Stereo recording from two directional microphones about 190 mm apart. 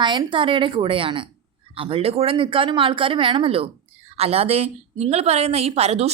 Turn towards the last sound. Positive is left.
turn(degrees=-35)  # may be behind; listen again after turning